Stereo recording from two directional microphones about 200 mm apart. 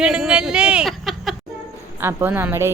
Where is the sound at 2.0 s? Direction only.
10° right (ahead or behind).